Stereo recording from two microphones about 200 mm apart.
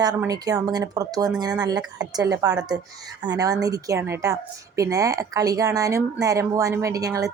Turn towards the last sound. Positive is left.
turn(degrees=-15)  # may be behind; listen again after turning